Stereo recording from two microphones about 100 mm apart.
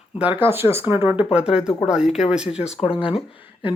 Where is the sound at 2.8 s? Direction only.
65° left (ahead or behind).